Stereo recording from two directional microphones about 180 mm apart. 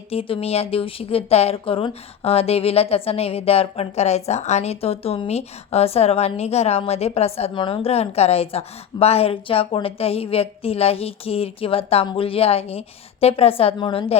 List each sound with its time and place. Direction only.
0.1 s a woman's voice: 30° left (ahead or behind)